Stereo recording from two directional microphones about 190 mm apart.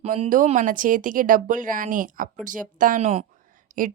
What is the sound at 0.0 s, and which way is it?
A woman's voice, 40° right (ahead or behind).